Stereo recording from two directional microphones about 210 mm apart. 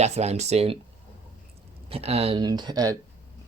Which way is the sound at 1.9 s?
30° right (ahead or behind).